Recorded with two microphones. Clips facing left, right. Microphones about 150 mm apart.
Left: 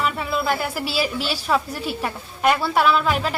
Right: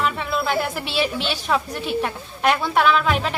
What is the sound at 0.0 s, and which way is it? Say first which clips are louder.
A woman's voice: even; 5° left (ahead or behind).